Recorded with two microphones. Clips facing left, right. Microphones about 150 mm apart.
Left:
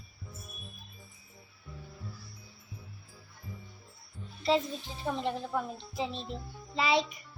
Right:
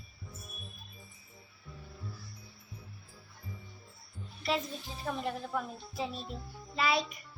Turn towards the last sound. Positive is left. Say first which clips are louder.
# left 3 dB
turn(degrees=25)  # may be behind; listen again after turning